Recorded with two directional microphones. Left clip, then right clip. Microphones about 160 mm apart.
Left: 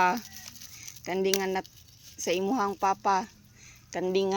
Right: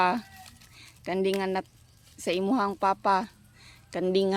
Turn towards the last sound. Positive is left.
turn(degrees=-35)  # may be behind; listen again after turning